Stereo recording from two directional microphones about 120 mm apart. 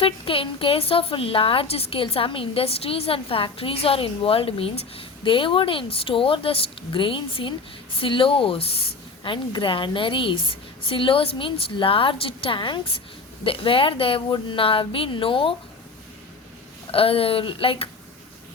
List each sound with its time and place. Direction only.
0.0 s a woman's voice: 50° left (ahead or behind)
16.9 s a woman's voice: 50° left (ahead or behind)